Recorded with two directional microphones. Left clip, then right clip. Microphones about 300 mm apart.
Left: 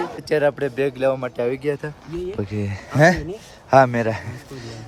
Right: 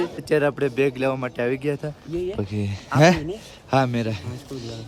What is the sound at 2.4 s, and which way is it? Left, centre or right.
Speech, centre.